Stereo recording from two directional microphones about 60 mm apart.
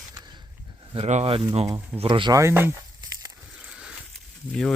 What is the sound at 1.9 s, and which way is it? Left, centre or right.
Speech, right.